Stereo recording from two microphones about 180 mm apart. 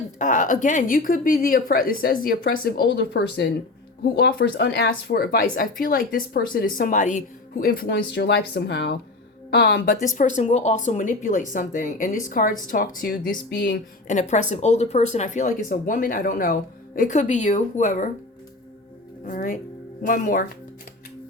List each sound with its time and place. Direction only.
0.2 s a woman's voice: 45° left (ahead or behind); by 9.0 s 65° left (ahead or behind)
9.6 s speech: 80° left
10.2 s a woman's voice: 45° left (ahead or behind)
19.2 s a woman's voice: 50° left (ahead or behind)